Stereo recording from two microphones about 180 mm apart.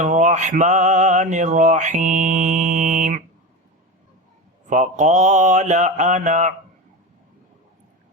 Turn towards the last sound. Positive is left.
turn(degrees=-40)  # may be behind; listen again after turning